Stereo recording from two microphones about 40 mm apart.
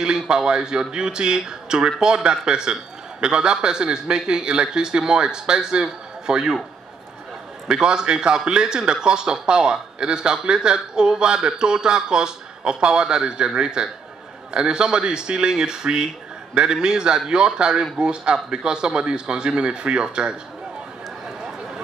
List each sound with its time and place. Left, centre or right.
0.0 s speech: centre
7.6 s speech: right